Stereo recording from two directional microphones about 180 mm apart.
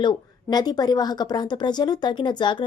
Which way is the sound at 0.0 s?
25° left (ahead or behind).